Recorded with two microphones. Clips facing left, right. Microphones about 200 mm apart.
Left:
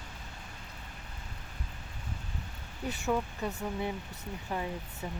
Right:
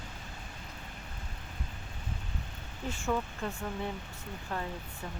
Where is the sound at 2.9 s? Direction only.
5° left (ahead or behind).